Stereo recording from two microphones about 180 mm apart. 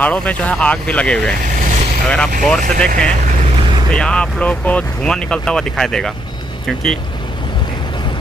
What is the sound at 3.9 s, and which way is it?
Speech, 5° left (ahead or behind).